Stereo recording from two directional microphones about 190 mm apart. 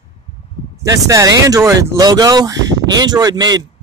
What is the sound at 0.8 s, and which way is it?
Speech, 20° right (ahead or behind).